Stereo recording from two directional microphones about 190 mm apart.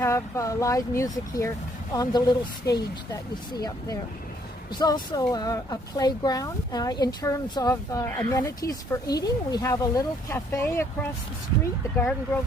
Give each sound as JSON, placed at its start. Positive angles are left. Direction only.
{"t": 0.0, "sound": "speech", "side_deg": 15}
{"t": 4.7, "sound": "speech", "side_deg": 20}